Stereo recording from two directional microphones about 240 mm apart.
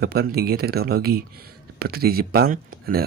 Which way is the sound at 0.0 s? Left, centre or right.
Right.